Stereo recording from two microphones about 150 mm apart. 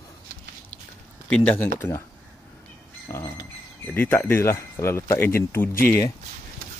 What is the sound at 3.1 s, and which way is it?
Speech, 15° left (ahead or behind).